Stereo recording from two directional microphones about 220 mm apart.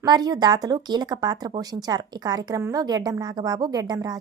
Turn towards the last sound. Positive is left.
turn(degrees=-15)  # may be behind; listen again after turning